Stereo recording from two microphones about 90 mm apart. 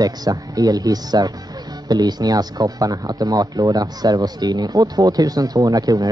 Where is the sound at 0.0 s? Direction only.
45° right (ahead or behind).